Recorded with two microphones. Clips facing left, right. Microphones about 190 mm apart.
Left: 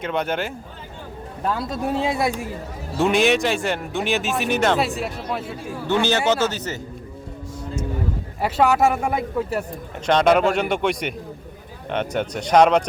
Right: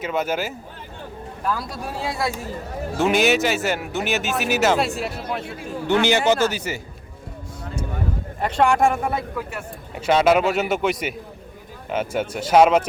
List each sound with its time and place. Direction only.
0.0 s speech: 5° right (ahead or behind)
1.5 s speech: 25° left (ahead or behind)
3.0 s speech: centre (ahead or behind)
6.1 s speech: 10° right (ahead or behind)
8.4 s speech: 5° left (ahead or behind)
9.3 s a man's voice: 30° left (ahead or behind)
9.9 s speech: 5° right (ahead or behind)